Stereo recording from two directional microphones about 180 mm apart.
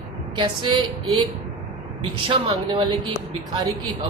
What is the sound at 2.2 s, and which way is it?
Speech, 25° right (ahead or behind).